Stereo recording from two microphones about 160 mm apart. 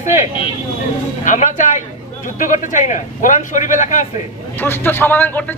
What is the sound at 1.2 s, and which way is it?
A man's voice, 50° left (ahead or behind).